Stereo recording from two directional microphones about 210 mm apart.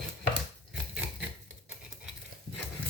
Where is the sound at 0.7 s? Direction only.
5° right (ahead or behind).